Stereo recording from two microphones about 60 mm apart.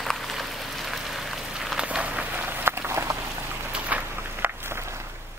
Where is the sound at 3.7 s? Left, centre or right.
Right.